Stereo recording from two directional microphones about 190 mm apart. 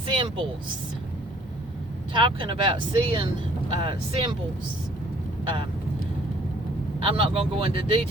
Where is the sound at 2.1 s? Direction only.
25° right (ahead or behind).